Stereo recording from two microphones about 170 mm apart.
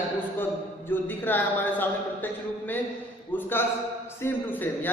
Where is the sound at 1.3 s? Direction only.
10° left (ahead or behind).